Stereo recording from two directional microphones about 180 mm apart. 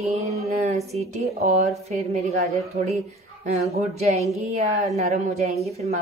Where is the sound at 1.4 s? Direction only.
35° right (ahead or behind).